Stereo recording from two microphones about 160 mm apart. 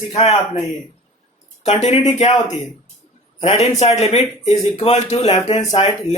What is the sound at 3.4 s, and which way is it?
Speech, 40° left (ahead or behind).